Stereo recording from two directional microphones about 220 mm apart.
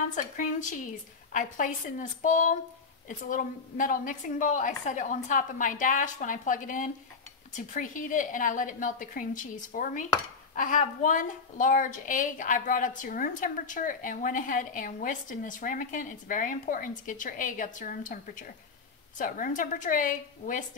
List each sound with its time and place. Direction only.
0.1 s a woman's voice: 35° left (ahead or behind)